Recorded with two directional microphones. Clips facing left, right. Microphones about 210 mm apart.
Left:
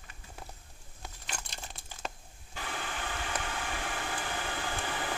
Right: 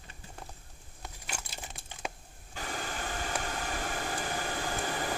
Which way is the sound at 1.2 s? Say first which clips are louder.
Right 1 dB; 10° right (ahead or behind).